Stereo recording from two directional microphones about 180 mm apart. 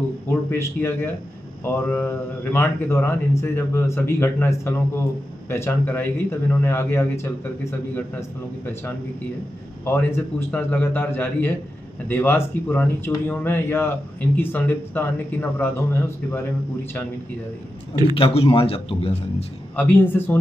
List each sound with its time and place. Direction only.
0.5 s speech: 10° left (ahead or behind)
9.8 s speech: 10° left (ahead or behind)
18.1 s a man's voice: 30° left (ahead or behind)
19.7 s speech: 10° left (ahead or behind)